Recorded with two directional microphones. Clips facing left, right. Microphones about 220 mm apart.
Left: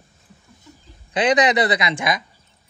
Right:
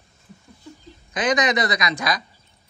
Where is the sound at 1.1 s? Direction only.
30° left (ahead or behind).